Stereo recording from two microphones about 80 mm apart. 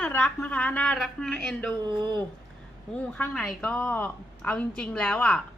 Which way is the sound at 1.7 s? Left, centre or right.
Right.